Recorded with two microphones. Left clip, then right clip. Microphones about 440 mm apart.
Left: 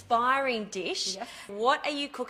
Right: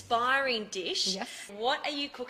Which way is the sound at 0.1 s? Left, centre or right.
Left.